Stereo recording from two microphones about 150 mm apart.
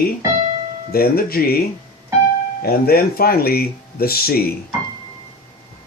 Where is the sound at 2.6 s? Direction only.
90° left.